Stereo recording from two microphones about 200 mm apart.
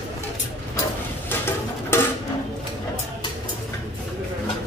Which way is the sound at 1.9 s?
10° left (ahead or behind).